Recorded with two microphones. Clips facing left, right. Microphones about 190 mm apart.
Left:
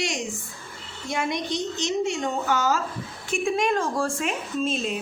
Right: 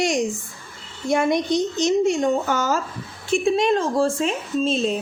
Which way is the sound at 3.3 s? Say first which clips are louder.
Right 5 dB; 25° right (ahead or behind).